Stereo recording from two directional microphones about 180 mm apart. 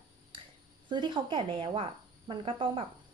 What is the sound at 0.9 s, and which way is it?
A woman's voice, 25° right (ahead or behind).